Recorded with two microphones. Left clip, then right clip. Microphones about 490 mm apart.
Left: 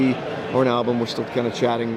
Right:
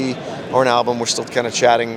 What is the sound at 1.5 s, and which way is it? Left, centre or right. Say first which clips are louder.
Speech: right 11 dB; right.